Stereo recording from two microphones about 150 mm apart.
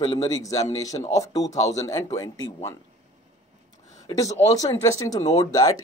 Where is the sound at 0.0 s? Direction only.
35° left (ahead or behind).